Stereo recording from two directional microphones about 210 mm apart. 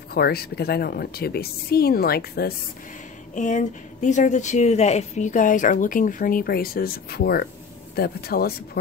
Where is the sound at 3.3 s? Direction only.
35° left (ahead or behind).